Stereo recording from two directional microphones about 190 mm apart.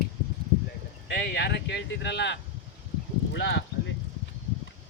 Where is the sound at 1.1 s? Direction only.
65° left (ahead or behind).